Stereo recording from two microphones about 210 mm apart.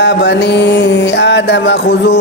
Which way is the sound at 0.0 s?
55° left (ahead or behind).